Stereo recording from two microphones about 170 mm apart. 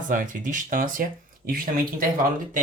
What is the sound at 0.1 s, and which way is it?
Speech, 50° right (ahead or behind).